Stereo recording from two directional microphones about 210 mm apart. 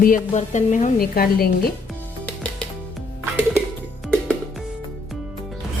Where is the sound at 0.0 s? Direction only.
40° left (ahead or behind).